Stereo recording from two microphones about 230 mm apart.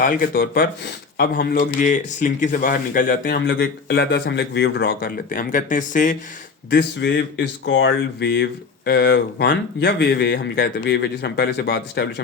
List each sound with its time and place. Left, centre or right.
0.0 s speech: left
6.7 s speech: left